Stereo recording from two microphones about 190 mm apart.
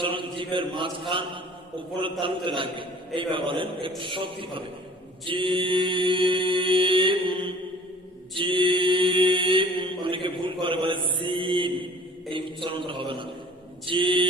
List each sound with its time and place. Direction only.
0.0 s mantra: 25° right (ahead or behind)
1.1 s a man's voice: 25° right (ahead or behind)
5.2 s mantra: 25° right (ahead or behind)
12.3 s a man's voice: 25° right (ahead or behind)